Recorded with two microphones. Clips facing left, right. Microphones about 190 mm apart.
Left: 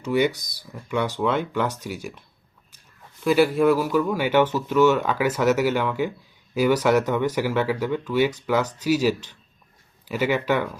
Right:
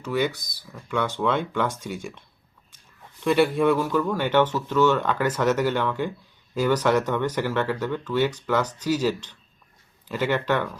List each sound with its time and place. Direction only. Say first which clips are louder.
0.0 s speech: left 3 dB; 15° left (ahead or behind)
3.2 s speech: left 2 dB; centre (ahead or behind)